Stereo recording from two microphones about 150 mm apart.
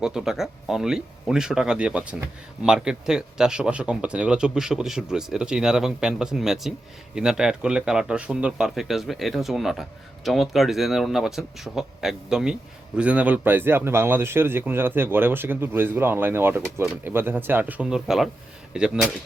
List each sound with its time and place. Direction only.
0.0 s speech: 5° right (ahead or behind)